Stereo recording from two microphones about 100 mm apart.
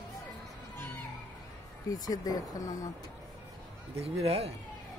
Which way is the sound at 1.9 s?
35° left (ahead or behind).